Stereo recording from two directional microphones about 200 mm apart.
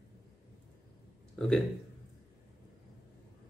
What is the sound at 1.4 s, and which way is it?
Speech, centre (ahead or behind).